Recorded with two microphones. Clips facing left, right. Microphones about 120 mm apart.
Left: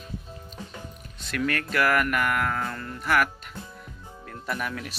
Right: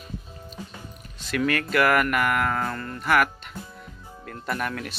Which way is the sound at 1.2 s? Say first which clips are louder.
Right 3 dB; centre (ahead or behind).